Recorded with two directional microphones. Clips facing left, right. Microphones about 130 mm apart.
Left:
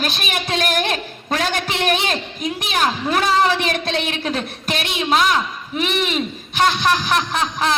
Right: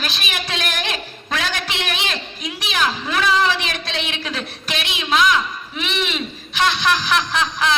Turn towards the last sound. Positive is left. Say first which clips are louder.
# even
turn(degrees=40)  # may be behind; listen again after turning